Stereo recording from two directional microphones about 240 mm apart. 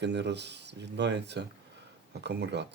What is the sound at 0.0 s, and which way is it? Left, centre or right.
Speech, right.